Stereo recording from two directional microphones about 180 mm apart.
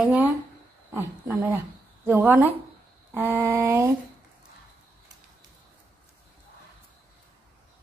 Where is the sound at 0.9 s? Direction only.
15° right (ahead or behind).